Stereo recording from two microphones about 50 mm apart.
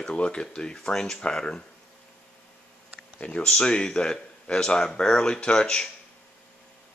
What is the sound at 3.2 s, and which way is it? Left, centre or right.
Speech, left.